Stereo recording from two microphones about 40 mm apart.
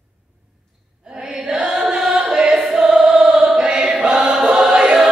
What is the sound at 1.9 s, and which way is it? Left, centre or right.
Chant, centre.